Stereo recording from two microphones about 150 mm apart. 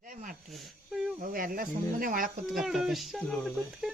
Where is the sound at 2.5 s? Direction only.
Centre (ahead or behind).